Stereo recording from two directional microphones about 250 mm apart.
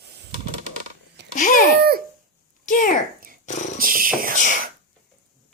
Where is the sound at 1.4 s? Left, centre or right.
Left.